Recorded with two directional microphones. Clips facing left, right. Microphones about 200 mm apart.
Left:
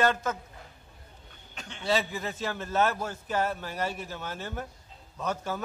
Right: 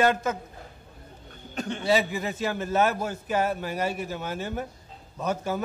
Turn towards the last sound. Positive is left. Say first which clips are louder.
# right 4 dB
turn(degrees=-10)  # may be behind; listen again after turning